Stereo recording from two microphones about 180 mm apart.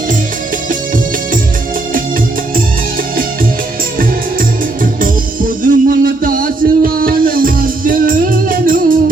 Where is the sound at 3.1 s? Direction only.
50° right (ahead or behind).